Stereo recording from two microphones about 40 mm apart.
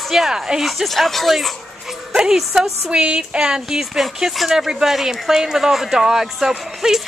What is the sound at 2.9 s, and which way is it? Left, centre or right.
A woman's voice, right.